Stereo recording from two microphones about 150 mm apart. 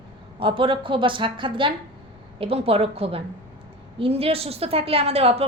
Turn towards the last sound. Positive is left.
turn(degrees=-40)  # may be behind; listen again after turning